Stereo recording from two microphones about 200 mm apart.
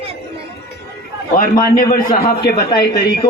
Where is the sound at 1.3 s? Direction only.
45° left (ahead or behind).